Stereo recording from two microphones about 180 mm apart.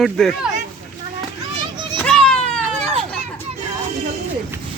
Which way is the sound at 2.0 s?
5° left (ahead or behind).